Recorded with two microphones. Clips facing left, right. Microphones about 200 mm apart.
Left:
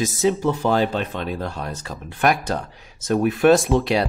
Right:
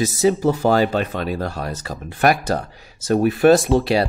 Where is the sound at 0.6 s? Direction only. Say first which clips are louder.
Right 3 dB; 40° right (ahead or behind).